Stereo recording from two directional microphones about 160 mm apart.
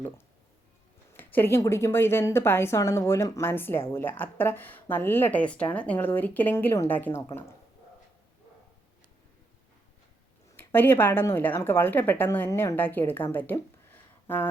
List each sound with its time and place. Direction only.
1.1 s a woman's voice: 10° left (ahead or behind)
10.6 s a woman's voice: 15° left (ahead or behind)